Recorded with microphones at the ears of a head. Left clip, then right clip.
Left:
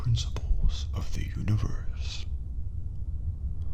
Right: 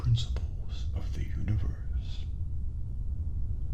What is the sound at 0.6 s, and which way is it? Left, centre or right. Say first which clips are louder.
Speech: left 6 dB; left.